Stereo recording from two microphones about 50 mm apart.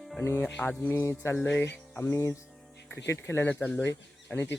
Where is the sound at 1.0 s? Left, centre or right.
Left.